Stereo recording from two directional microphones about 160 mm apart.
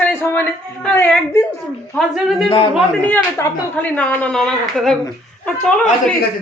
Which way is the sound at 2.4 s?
35° left (ahead or behind).